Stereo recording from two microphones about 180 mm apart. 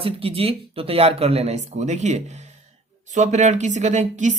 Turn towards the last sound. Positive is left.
turn(degrees=-40)  # may be behind; listen again after turning